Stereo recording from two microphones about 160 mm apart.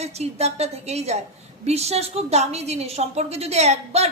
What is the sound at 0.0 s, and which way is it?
A woman's voice, 40° right (ahead or behind).